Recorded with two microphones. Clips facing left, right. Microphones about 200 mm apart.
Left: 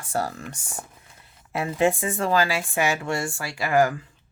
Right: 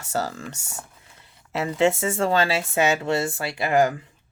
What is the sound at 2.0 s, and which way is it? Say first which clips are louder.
Speech: right 1 dB; 25° right (ahead or behind).